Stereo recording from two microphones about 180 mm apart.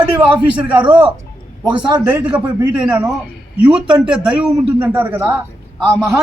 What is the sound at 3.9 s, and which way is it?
A man's voice, 5° right (ahead or behind).